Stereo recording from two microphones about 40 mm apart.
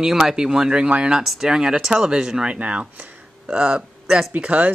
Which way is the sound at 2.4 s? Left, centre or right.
Right.